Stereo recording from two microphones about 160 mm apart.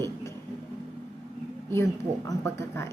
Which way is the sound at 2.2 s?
15° left (ahead or behind).